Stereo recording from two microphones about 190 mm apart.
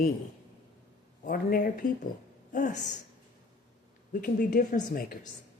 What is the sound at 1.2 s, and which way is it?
Speech, 45° left (ahead or behind).